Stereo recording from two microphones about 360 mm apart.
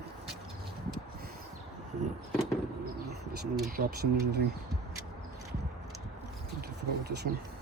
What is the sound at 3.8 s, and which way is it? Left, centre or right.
Speech, right.